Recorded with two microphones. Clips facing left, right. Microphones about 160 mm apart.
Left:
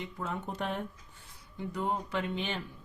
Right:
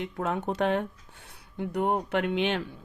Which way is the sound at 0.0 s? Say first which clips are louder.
Right 7 dB; 70° right (ahead or behind).